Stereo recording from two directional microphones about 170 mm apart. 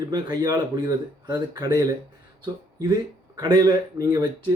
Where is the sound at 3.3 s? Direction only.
20° right (ahead or behind).